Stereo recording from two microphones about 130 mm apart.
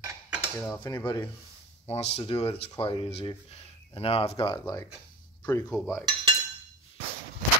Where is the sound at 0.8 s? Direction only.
35° left (ahead or behind).